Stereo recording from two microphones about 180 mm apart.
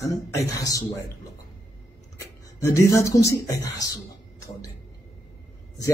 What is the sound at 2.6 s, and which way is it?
Speech, 15° left (ahead or behind).